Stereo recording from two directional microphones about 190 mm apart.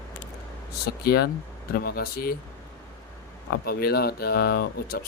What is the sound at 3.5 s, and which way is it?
Speech, 55° left (ahead or behind).